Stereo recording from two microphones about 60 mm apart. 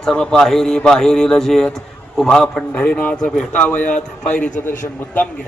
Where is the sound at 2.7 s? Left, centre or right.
Left.